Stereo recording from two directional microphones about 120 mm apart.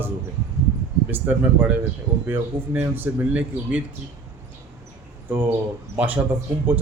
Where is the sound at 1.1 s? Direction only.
15° right (ahead or behind).